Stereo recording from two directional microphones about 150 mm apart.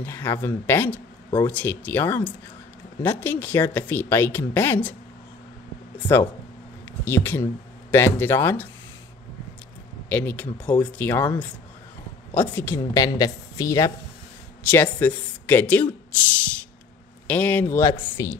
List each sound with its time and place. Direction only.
0.0 s speech: 15° left (ahead or behind)
5.9 s speech: 15° left (ahead or behind)
10.0 s a woman's voice: 10° left (ahead or behind)
17.3 s speech: 10° left (ahead or behind)